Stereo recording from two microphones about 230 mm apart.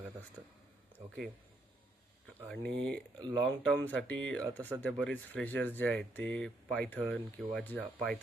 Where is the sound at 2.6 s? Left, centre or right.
Right.